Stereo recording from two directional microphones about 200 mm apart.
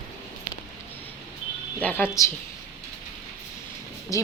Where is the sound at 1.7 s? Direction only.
10° left (ahead or behind).